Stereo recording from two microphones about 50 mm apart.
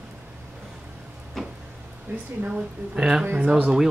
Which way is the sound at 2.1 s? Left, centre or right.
Right.